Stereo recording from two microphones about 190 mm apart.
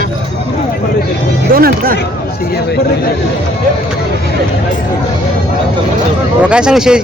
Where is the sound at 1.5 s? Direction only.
50° right (ahead or behind).